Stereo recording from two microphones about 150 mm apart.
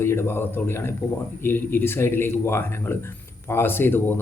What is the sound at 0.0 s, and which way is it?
Speech, 15° left (ahead or behind).